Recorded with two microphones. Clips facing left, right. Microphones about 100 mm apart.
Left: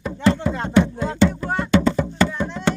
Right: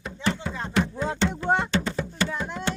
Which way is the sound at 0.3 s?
75° left (ahead or behind).